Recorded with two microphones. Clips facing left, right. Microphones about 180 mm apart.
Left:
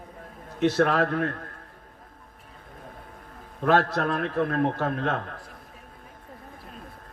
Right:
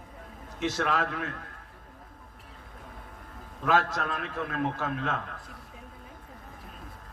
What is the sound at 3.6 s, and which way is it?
A man's voice, 45° left (ahead or behind).